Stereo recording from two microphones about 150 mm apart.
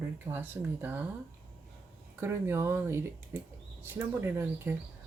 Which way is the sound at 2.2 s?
15° right (ahead or behind).